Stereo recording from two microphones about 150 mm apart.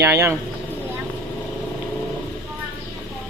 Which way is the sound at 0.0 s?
15° right (ahead or behind).